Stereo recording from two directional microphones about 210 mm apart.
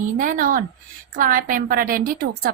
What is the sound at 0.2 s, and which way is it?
A woman's voice, 40° right (ahead or behind).